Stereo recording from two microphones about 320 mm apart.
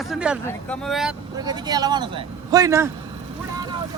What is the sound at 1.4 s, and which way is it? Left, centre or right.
A man's voice, centre.